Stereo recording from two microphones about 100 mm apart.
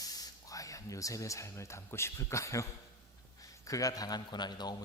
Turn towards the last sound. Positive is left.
turn(degrees=45)  # may be behind; listen again after turning